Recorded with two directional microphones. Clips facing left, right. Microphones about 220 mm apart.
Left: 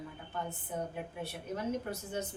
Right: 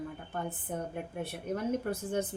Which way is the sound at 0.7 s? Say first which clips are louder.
Right 1 dB; 55° right (ahead or behind).